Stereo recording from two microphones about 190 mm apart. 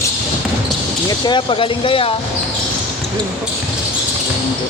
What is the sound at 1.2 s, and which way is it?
Speech, 25° left (ahead or behind).